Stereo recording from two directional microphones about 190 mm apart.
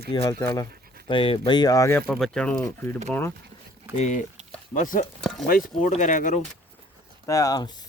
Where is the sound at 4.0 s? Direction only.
40° left (ahead or behind).